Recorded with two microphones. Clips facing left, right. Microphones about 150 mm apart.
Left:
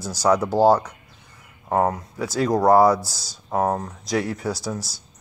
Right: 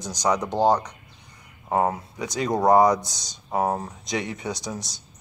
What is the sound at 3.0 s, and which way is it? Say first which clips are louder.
Speech: left 3 dB; 5° left (ahead or behind).